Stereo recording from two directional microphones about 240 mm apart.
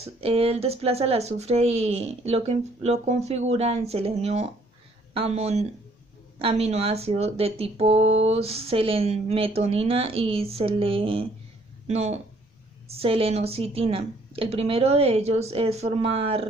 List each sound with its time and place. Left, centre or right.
0.0 s speech: right
8.0 s a sound: right
8.3 s speech: right